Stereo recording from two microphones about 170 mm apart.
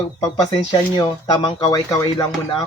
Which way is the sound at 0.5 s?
25° left (ahead or behind).